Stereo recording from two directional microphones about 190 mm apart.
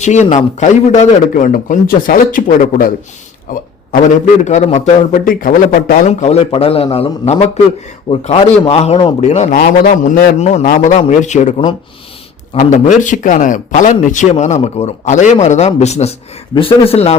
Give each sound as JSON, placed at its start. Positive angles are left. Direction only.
{"t": 0.0, "sound": "a man's voice", "side_deg": 40}
{"t": 6.1, "sound": "speech", "side_deg": 35}
{"t": 9.6, "sound": "speech", "side_deg": 50}